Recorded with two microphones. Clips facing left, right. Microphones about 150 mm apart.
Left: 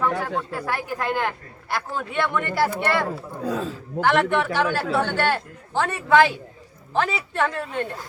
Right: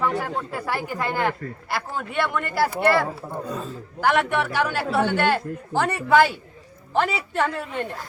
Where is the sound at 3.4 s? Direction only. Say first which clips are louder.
Left 9 dB; 90° left.